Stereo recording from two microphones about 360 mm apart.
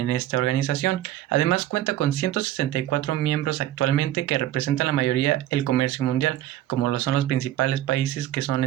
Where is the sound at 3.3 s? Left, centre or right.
Left.